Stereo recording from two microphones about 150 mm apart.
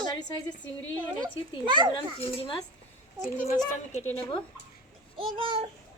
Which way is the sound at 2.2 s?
40° left (ahead or behind).